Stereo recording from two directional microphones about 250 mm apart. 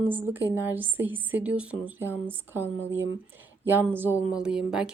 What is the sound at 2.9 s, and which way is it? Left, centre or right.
Speech, right.